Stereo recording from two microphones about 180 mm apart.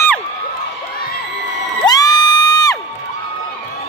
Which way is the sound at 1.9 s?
20° left (ahead or behind).